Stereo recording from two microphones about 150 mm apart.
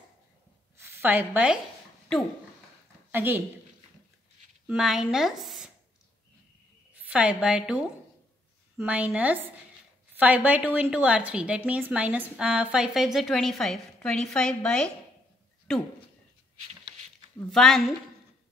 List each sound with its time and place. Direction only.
0.8 s a woman's voice: 15° right (ahead or behind)
3.1 s a woman's voice: 15° right (ahead or behind)
4.6 s a woman's voice: 5° right (ahead or behind)
7.0 s a woman's voice: 10° right (ahead or behind)
17.5 s a woman's voice: centre (ahead or behind)